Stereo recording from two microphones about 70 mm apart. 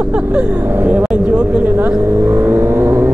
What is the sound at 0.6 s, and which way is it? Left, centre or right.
Speech, right.